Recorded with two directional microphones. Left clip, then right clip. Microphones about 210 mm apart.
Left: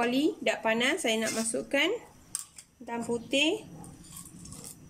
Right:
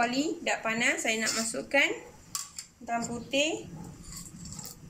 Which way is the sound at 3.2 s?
45° left (ahead or behind).